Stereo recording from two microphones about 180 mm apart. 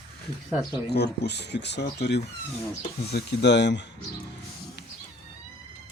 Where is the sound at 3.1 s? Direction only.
70° left (ahead or behind).